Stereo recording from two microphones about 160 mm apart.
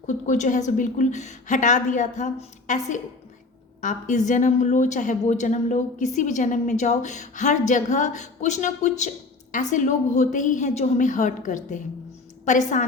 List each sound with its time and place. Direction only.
0.3 s a woman's voice: 50° left (ahead or behind)